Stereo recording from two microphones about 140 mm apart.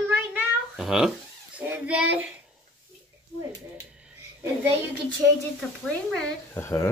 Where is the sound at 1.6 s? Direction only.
10° right (ahead or behind).